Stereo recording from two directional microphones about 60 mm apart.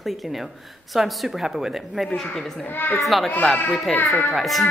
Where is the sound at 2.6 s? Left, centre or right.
Left.